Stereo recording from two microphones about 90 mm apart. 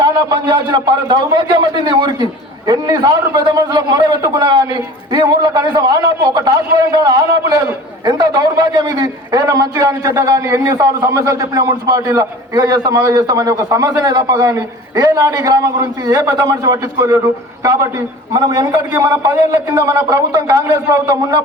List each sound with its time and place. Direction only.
0.0 s a man's voice: 55° right (ahead or behind); by 17.2 s 35° right (ahead or behind)
18.3 s a man's voice: 45° right (ahead or behind)